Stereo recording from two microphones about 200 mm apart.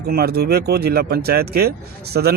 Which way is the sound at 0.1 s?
50° right (ahead or behind).